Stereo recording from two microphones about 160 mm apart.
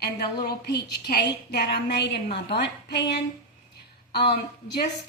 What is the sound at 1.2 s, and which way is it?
A woman's voice, 90° left.